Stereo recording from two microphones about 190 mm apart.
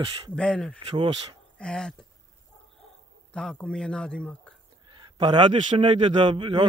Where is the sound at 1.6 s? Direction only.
5° left (ahead or behind).